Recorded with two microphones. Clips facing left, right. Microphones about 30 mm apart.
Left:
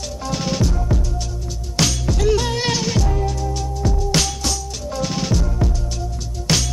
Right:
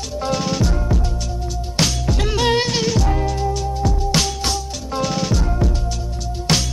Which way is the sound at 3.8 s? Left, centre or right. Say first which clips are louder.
Left 1 dB; centre.